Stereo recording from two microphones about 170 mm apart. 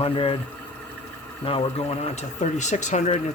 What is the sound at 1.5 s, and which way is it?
Speech, 35° left (ahead or behind).